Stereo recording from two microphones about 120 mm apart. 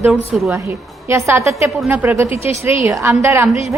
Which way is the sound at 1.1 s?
25° right (ahead or behind).